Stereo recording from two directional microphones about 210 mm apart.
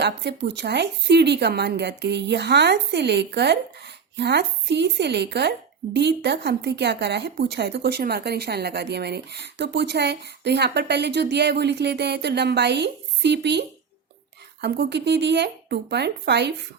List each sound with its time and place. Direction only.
0.0 s speech: 55° right (ahead or behind)